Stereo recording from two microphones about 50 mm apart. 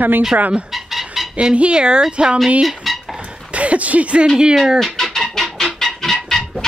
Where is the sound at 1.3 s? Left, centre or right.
Right.